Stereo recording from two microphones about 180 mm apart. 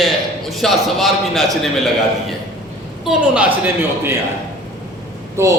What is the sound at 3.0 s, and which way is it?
A man's voice, 10° right (ahead or behind).